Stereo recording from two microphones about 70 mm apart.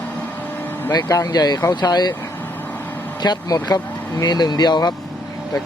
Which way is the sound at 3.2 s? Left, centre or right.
Left.